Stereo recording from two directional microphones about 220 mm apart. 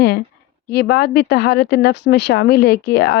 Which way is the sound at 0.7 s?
50° left (ahead or behind).